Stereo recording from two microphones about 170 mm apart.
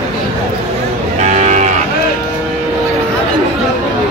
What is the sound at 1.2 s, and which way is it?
Moo, 45° right (ahead or behind).